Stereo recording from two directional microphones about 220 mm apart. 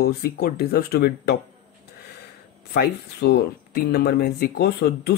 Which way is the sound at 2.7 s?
45° left (ahead or behind).